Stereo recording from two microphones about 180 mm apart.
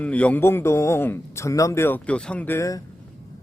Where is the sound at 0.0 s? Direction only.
5° left (ahead or behind).